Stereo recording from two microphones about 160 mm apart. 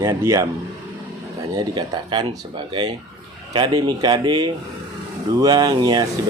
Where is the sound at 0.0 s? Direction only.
20° right (ahead or behind).